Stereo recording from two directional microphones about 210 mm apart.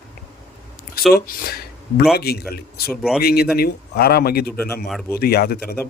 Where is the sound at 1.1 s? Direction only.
45° left (ahead or behind).